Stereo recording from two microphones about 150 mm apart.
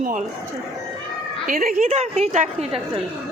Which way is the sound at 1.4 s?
65° right (ahead or behind).